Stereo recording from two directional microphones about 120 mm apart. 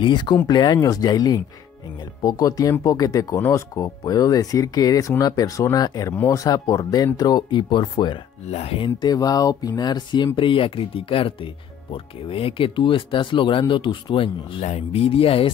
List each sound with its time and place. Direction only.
0.0 s speech: 40° left (ahead or behind)
8.5 s speech: 60° left (ahead or behind)
9.0 s speech: 30° left (ahead or behind)
14.6 s speech: 60° left (ahead or behind)